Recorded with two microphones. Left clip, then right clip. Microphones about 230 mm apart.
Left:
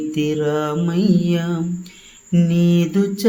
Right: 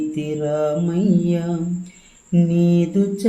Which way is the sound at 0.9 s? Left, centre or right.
Left.